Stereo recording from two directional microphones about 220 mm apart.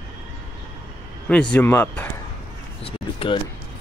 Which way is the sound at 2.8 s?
25° left (ahead or behind).